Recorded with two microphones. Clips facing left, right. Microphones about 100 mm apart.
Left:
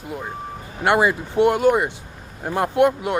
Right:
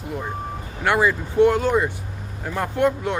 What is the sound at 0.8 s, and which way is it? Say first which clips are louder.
Speech: left 2 dB; 15° left (ahead or behind).